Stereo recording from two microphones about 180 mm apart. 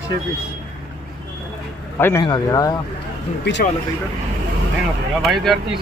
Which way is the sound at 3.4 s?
75° left (ahead or behind).